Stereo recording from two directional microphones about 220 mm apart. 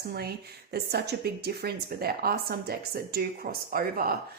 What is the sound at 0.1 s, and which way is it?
Speech, 45° right (ahead or behind).